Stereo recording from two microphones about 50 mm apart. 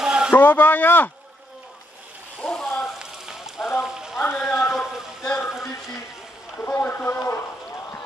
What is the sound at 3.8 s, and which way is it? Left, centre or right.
Rain on surface, centre.